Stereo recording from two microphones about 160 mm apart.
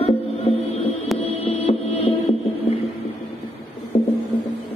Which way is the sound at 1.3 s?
40° left (ahead or behind).